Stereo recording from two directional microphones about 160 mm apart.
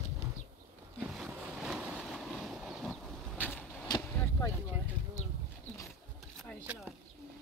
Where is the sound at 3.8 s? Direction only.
25° left (ahead or behind).